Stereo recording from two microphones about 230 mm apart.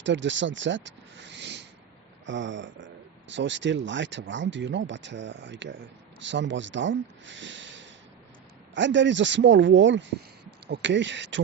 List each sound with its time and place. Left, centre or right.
0.0 s speech: right